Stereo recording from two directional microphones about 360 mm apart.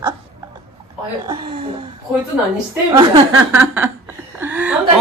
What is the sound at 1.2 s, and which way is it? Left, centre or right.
Speech, centre.